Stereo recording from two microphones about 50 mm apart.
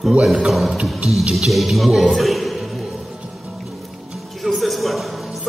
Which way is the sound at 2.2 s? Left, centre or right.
Centre.